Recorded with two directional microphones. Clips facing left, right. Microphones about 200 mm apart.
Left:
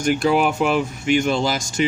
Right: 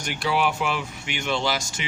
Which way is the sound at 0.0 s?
45° left (ahead or behind).